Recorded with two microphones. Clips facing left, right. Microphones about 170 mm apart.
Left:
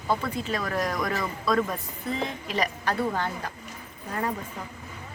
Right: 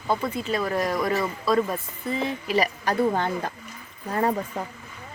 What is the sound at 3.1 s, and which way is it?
Speech, 25° right (ahead or behind).